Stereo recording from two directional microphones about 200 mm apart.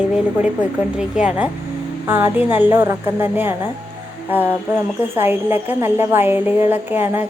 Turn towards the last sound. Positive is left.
turn(degrees=-10)  # may be behind; listen again after turning